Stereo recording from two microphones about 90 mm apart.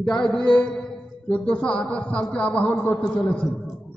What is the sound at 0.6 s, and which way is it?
Music, 5° left (ahead or behind).